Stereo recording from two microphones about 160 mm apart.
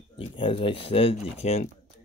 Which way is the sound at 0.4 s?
30° left (ahead or behind).